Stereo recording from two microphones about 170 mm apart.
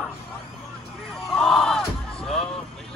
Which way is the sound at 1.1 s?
Centre (ahead or behind).